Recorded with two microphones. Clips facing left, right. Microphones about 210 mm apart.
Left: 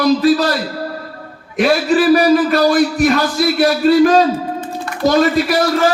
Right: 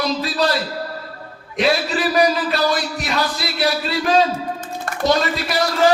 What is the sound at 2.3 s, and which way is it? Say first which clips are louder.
A man's voice: left 8 dB; 50° left (ahead or behind).